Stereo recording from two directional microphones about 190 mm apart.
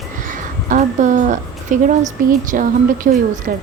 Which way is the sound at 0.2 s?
45° right (ahead or behind).